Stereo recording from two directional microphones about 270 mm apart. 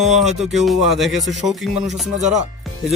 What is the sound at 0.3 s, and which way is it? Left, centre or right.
Speech, centre.